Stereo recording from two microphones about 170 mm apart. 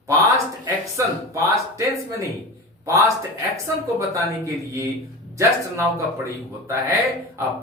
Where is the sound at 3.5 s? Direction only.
20° right (ahead or behind).